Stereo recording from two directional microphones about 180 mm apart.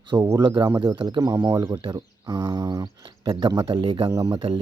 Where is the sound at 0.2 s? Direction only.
15° right (ahead or behind).